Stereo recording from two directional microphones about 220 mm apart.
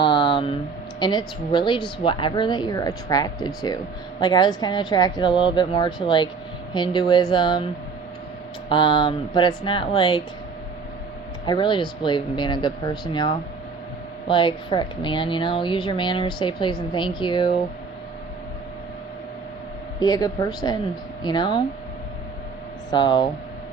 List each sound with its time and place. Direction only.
0.0 s a sound: 20° left (ahead or behind)
0.9 s a woman's voice: 20° left (ahead or behind)
8.7 s a woman's voice: 20° left (ahead or behind)
11.4 s a woman's voice: 20° left (ahead or behind)
20.0 s a woman's voice: 15° left (ahead or behind)
22.9 s a woman's voice: 20° left (ahead or behind)